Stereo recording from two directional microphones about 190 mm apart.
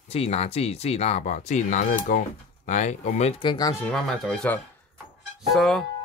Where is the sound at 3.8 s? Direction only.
Centre (ahead or behind).